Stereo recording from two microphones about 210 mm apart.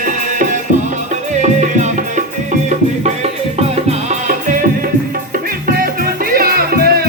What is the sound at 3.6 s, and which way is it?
Music, 30° right (ahead or behind).